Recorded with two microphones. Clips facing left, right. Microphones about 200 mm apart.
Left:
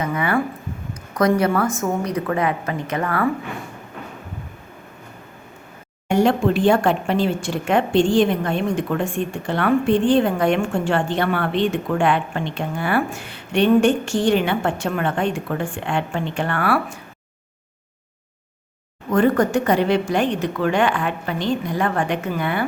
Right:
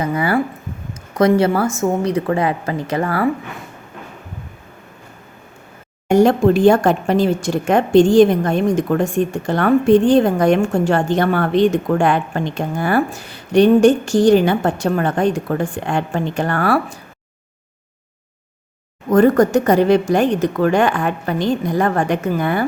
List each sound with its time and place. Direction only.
0.0 s a sound: 35° right (ahead or behind)
1.1 s a woman's voice: 30° right (ahead or behind)
6.1 s a woman's voice: 40° right (ahead or behind)
19.1 s a woman's voice: 40° right (ahead or behind)